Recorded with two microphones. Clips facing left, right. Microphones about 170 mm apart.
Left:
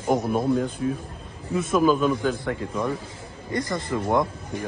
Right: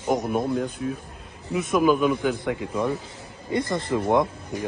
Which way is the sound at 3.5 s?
25° right (ahead or behind).